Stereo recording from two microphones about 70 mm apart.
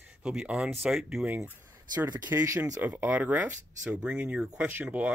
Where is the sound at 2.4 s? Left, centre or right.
Right.